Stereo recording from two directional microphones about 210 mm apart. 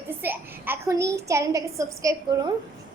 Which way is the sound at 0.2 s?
10° right (ahead or behind).